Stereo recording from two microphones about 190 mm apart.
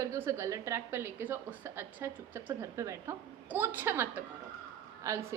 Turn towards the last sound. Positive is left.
turn(degrees=-15)  # may be behind; listen again after turning